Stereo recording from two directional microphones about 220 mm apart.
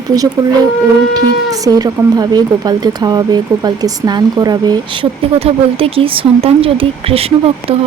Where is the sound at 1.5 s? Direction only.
15° right (ahead or behind).